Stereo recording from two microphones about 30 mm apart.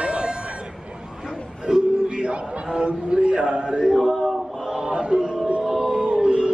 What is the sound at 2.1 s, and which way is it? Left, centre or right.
Music, right.